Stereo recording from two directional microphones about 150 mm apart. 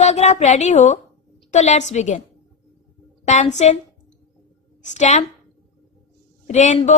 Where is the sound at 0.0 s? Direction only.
50° left (ahead or behind).